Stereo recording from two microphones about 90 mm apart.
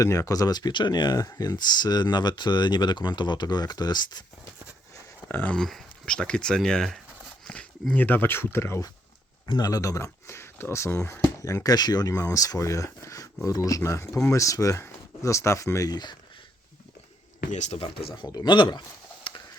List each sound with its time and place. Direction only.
0.0 s speech: 40° left (ahead or behind)
5.3 s speech: 20° left (ahead or behind)
5.5 s speech: 5° left (ahead or behind); by 8.8 s 30° left (ahead or behind)
9.5 s speech: 45° left (ahead or behind)
18.1 s speech: 50° left (ahead or behind)
19.3 s a sound: 70° left (ahead or behind)